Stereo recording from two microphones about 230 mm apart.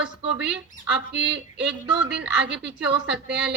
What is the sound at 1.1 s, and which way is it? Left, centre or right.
Speech, right.